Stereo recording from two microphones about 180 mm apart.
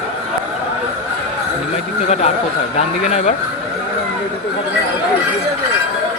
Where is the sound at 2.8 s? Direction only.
35° left (ahead or behind).